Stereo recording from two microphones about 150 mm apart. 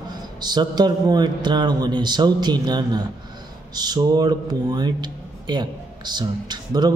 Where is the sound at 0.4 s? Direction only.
30° right (ahead or behind).